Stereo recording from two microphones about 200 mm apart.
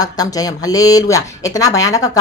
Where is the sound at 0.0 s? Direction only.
20° left (ahead or behind).